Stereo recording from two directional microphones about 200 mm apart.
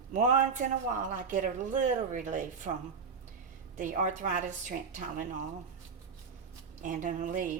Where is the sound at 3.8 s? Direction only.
40° right (ahead or behind).